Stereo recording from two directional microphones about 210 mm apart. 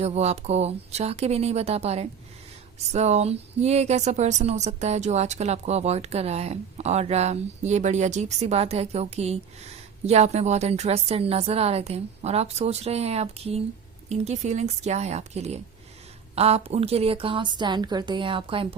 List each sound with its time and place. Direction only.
0.0 s a woman's voice: 30° right (ahead or behind)